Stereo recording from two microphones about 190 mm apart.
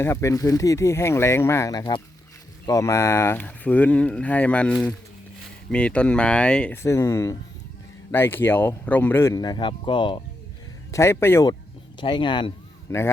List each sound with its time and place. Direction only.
0.0 s a man's voice: 15° left (ahead or behind)
5.7 s a man's voice: 5° left (ahead or behind); by 10.2 s 25° left (ahead or behind)
10.9 s a man's voice: 15° left (ahead or behind)
11.9 s speech: 25° left (ahead or behind)